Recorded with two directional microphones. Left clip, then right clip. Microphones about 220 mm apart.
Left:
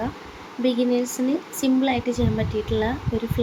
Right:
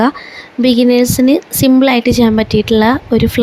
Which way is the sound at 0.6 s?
50° right (ahead or behind).